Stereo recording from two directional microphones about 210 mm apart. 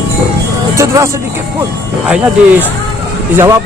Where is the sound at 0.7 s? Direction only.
15° right (ahead or behind).